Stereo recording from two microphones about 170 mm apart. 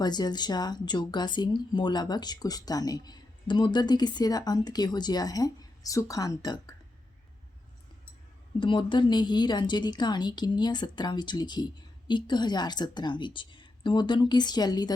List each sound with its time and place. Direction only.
0.0 s speech: 25° left (ahead or behind)
8.5 s speech: 30° left (ahead or behind)